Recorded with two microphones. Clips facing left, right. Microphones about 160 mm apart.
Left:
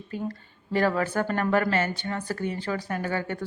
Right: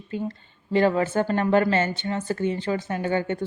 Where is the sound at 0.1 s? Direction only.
20° right (ahead or behind).